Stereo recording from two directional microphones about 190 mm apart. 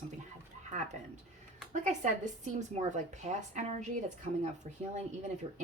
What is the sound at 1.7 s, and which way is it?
Speech, 40° right (ahead or behind).